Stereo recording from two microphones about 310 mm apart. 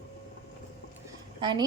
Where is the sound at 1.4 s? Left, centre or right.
Centre.